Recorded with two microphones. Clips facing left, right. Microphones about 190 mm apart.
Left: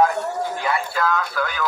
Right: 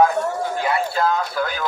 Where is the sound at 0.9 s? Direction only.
35° right (ahead or behind).